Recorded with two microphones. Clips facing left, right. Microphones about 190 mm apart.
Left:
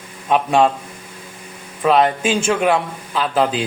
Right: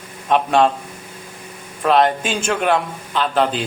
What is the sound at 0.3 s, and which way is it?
Speech, 5° left (ahead or behind).